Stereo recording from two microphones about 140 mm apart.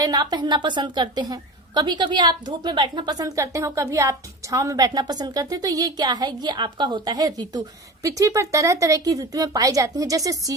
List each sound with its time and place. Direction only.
0.0 s a woman's voice: 25° right (ahead or behind)